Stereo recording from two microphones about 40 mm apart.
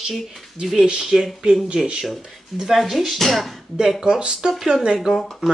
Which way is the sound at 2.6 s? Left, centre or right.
Centre.